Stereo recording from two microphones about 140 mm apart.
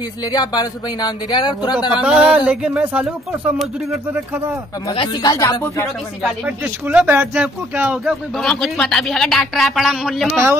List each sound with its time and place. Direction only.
0.2 s speech: 30° left (ahead or behind)
2.0 s speech: 5° right (ahead or behind)
4.9 s speech: 35° left (ahead or behind)
6.4 s speech: 10° right (ahead or behind)
8.0 s speech: centre (ahead or behind)